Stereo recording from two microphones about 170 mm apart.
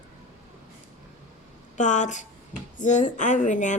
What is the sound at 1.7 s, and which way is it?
Speech, 45° left (ahead or behind).